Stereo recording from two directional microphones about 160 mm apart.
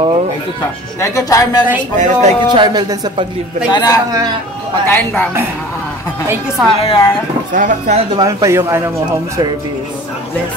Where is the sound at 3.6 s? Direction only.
25° left (ahead or behind).